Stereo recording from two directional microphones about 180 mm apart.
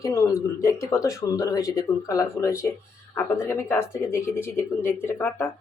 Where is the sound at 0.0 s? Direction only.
15° left (ahead or behind).